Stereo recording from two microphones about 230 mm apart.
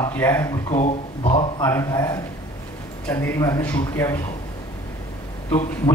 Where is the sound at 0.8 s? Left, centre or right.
Left.